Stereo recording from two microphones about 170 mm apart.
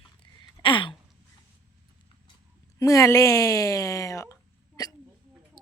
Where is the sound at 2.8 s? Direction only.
20° left (ahead or behind).